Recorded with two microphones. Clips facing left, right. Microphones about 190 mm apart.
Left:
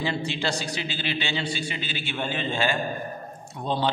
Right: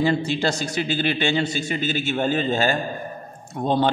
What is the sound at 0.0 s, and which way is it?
A man's voice, 45° right (ahead or behind).